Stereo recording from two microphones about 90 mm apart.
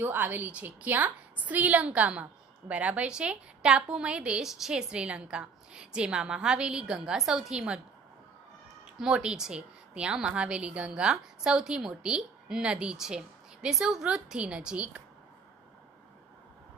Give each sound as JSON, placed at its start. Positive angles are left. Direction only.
{"t": 0.0, "sound": "a woman's voice", "side_deg": -20}
{"t": 8.9, "sound": "a woman's voice", "side_deg": -10}